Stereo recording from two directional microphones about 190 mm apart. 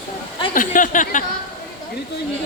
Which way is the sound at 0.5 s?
45° left (ahead or behind).